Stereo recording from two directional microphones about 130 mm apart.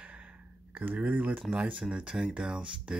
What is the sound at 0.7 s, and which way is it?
Speech, 15° right (ahead or behind).